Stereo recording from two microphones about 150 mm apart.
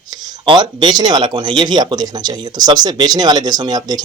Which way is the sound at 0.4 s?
30° right (ahead or behind).